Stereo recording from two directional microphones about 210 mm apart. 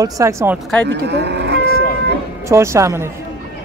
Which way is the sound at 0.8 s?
55° right (ahead or behind).